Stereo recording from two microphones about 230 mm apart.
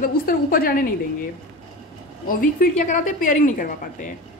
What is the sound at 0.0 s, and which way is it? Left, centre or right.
Speech, left.